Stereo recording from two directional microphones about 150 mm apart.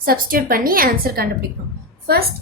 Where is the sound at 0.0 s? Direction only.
75° right (ahead or behind).